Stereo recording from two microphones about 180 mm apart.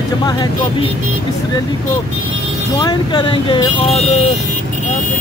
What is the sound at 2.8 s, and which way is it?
Speech, 25° left (ahead or behind).